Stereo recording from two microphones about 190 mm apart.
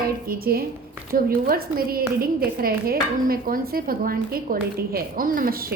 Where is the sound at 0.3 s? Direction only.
50° right (ahead or behind).